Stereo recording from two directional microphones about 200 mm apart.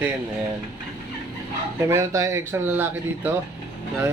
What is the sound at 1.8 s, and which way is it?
Speech, 15° right (ahead or behind).